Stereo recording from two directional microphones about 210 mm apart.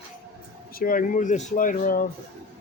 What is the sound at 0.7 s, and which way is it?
Speech, 40° left (ahead or behind).